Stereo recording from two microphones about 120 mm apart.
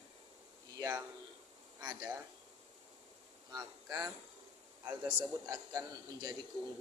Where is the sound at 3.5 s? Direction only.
30° right (ahead or behind).